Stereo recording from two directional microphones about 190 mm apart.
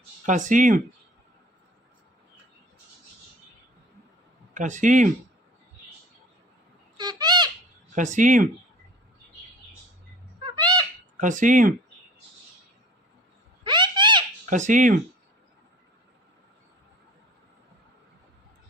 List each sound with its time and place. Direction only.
0.3 s speech: 40° right (ahead or behind)
4.5 s speech: 40° right (ahead or behind)
6.9 s bird: 20° right (ahead or behind)
7.9 s speech: 40° right (ahead or behind)
10.4 s bird: 20° right (ahead or behind)
11.2 s speech: 40° right (ahead or behind)
13.7 s a sound: 25° right (ahead or behind)
14.5 s speech: 40° right (ahead or behind)